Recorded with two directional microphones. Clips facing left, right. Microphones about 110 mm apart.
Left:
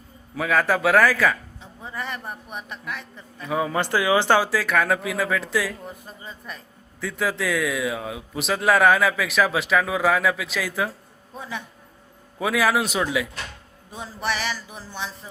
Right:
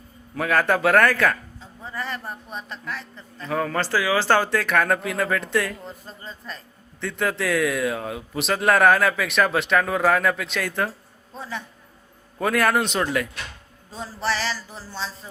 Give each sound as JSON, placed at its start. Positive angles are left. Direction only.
{"t": 0.3, "sound": "a man's voice", "side_deg": 0}
{"t": 1.5, "sound": "speech", "side_deg": 20}
{"t": 4.4, "sound": "a man's voice", "side_deg": 5}
{"t": 5.8, "sound": "speech", "side_deg": 15}
{"t": 7.0, "sound": "a man's voice", "side_deg": 0}
{"t": 11.3, "sound": "a man's voice", "side_deg": 15}
{"t": 12.4, "sound": "a man's voice", "side_deg": 0}
{"t": 13.9, "sound": "speech", "side_deg": 15}